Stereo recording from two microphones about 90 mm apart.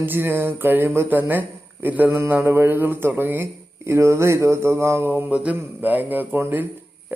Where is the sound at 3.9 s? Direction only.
30° right (ahead or behind).